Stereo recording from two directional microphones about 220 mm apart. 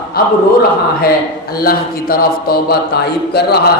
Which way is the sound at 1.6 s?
40° left (ahead or behind).